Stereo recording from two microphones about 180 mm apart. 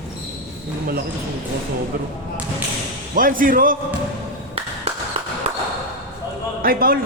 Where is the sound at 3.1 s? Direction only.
50° right (ahead or behind).